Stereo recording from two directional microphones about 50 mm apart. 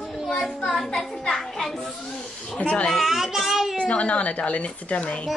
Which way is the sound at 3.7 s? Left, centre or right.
Left.